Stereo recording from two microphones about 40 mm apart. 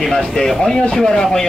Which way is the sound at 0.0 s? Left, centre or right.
Centre.